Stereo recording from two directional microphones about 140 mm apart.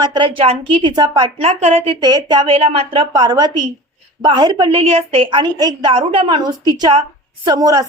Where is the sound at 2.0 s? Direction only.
30° right (ahead or behind).